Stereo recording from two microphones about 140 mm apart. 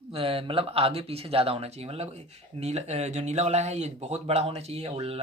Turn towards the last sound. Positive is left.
turn(degrees=-45)  # may be behind; listen again after turning